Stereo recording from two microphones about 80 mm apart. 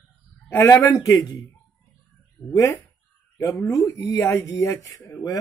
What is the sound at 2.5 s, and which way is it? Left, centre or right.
Speech, left.